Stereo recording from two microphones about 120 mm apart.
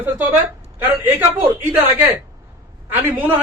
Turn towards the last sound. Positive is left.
turn(degrees=-15)  # may be behind; listen again after turning